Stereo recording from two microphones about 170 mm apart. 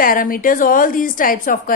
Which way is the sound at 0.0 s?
55° left (ahead or behind).